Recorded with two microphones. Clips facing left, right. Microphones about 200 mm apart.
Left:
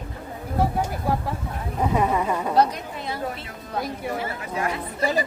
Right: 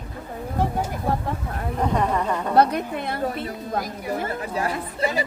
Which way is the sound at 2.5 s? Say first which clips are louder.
Right 4 dB; 60° right (ahead or behind).